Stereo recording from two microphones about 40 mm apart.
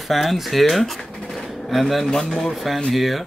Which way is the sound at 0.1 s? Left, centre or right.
Centre.